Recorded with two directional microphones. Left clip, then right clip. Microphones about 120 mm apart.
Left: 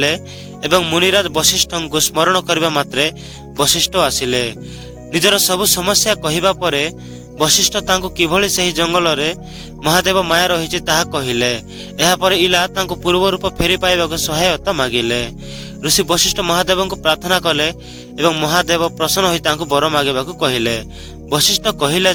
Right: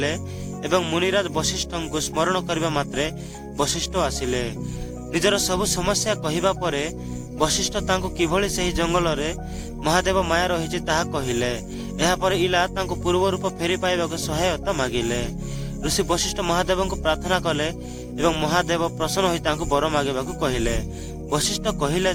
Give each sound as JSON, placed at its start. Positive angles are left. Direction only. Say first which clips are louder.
{"t": 0.6, "sound": "a man's voice", "louder": "left 8 dB", "side_deg": 40}